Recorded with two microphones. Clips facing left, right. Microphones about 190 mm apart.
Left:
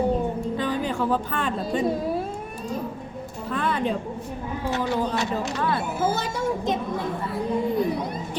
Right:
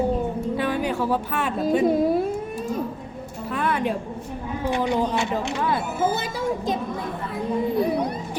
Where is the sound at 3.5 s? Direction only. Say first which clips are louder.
Right 1 dB; 10° right (ahead or behind).